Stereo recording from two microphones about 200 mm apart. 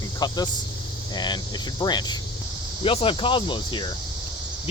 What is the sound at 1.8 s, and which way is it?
Speech, 20° left (ahead or behind).